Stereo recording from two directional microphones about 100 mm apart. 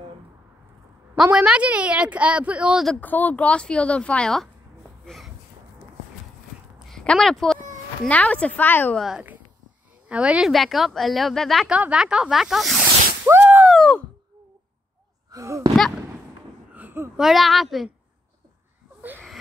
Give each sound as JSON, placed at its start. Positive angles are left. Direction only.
{"t": 1.1, "sound": "a woman's voice", "side_deg": -5}
{"t": 3.0, "sound": "speech", "side_deg": 15}
{"t": 5.0, "sound": "a sound", "side_deg": 0}
{"t": 6.9, "sound": "speech", "side_deg": 5}
{"t": 8.9, "sound": "speech", "side_deg": 0}
{"t": 10.0, "sound": "a woman's voice", "side_deg": -10}
{"t": 10.5, "sound": "speech", "side_deg": 0}
{"t": 11.7, "sound": "speech", "side_deg": -10}
{"t": 13.4, "sound": "a sound", "side_deg": -15}
{"t": 13.7, "sound": "a sound", "side_deg": 5}
{"t": 15.3, "sound": "speech", "side_deg": -35}
{"t": 16.7, "sound": "a sound", "side_deg": -20}
{"t": 17.2, "sound": "speech", "side_deg": 0}